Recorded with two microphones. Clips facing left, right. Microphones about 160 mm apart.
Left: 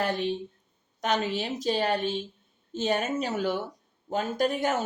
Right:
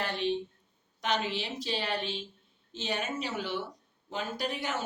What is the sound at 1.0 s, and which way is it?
Speech, 45° left (ahead or behind).